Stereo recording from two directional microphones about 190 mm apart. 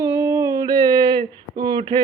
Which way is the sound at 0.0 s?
15° right (ahead or behind).